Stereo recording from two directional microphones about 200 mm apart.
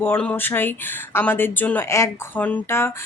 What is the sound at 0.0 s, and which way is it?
Speech, 10° left (ahead or behind).